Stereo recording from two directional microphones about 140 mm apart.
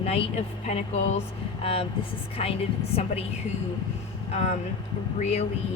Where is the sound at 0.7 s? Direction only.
50° left (ahead or behind).